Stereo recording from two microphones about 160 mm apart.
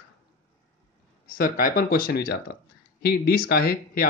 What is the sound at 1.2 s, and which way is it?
Speech, 65° left (ahead or behind).